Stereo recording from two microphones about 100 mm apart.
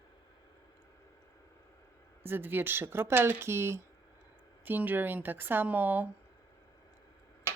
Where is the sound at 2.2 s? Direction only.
20° right (ahead or behind).